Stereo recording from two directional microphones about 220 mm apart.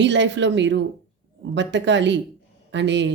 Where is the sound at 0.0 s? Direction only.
55° right (ahead or behind).